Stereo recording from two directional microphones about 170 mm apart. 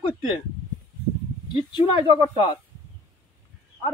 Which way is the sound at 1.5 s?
30° left (ahead or behind).